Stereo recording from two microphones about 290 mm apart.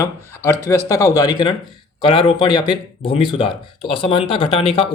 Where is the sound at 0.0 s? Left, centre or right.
Centre.